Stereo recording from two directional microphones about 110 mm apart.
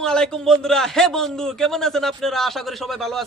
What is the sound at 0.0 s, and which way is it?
A man's voice, 5° left (ahead or behind).